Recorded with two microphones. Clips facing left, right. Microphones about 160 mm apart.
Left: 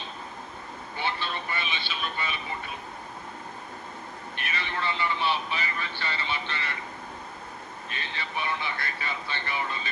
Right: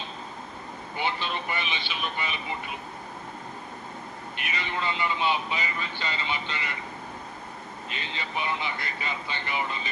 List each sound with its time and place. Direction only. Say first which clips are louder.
0.9 s speech: right 2 dB; 15° right (ahead or behind)
4.4 s speech: right 1 dB; 15° right (ahead or behind)
7.9 s speech: right 1 dB; 15° right (ahead or behind)